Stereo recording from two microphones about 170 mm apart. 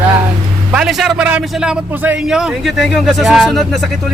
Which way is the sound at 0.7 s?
Centre (ahead or behind).